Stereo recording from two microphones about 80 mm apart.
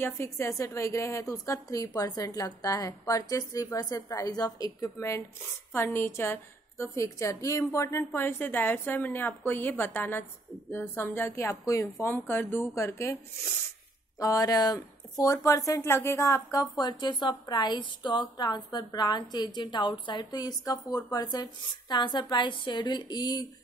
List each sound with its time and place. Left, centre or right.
0.0 s a woman's voice: left
4.9 s a woman's voice: left
12.0 s a woman's voice: left
14.1 s a woman's voice: left
15.8 s a woman's voice: left
16.5 s a woman's voice: left